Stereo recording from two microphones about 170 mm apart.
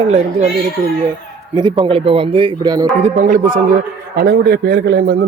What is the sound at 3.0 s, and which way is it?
Speech, 45° right (ahead or behind).